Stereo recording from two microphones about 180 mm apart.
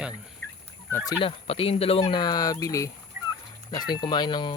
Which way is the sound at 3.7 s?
20° left (ahead or behind).